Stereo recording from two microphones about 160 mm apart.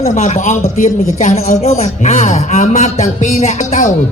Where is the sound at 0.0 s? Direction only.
50° left (ahead or behind).